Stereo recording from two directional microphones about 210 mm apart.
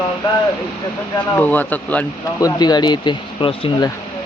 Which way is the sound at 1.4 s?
5° left (ahead or behind).